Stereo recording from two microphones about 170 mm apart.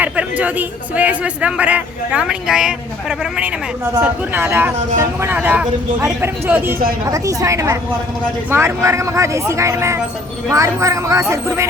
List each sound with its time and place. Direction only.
0.0 s a man's voice: 10° right (ahead or behind)